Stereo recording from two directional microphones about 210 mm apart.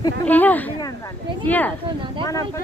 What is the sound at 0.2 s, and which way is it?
Speech, 10° left (ahead or behind).